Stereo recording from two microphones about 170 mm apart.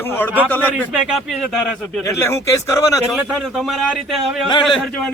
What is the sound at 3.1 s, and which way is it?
Speech, centre (ahead or behind).